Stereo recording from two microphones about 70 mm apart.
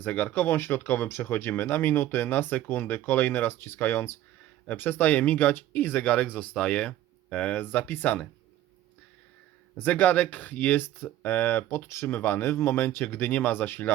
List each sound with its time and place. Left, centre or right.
0.0 s speech: left
4.8 s speech: left; by 7.5 s centre
7.5 s speech: left
9.7 s speech: left